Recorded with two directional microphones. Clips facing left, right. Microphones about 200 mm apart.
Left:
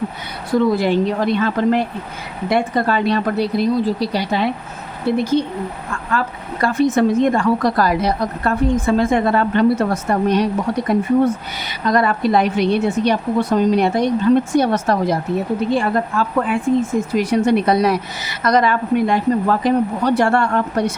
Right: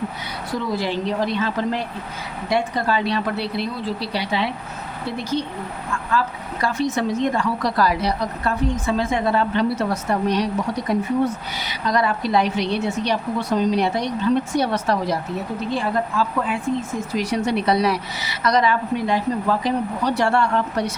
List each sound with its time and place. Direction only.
0.8 s speech: 55° left (ahead or behind)